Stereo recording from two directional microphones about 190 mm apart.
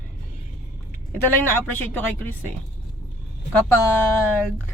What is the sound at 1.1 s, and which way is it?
Speech, 10° left (ahead or behind).